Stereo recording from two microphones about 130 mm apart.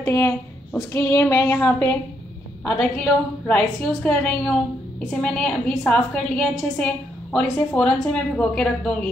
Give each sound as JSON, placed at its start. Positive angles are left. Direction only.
{"t": 0.0, "sound": "a woman's voice", "side_deg": 15}
{"t": 0.9, "sound": "child singing", "side_deg": 20}
{"t": 2.6, "sound": "a woman's voice", "side_deg": 10}